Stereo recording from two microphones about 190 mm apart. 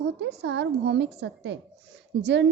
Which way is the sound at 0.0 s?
65° right (ahead or behind).